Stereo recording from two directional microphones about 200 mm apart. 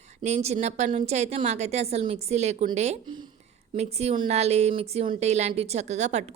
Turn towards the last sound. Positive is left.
turn(degrees=-35)  # may be behind; listen again after turning